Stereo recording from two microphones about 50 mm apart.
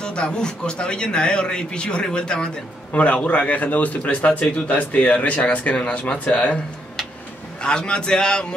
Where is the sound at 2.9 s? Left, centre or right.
Left.